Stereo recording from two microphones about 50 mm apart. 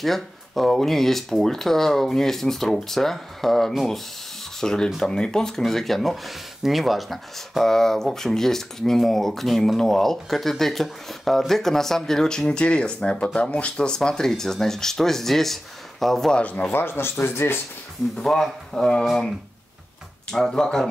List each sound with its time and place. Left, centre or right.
0.0 s speech: centre
5.6 s speech: centre
16.3 s speech: left
16.7 s speech: left
18.1 s speech: centre
20.3 s speech: centre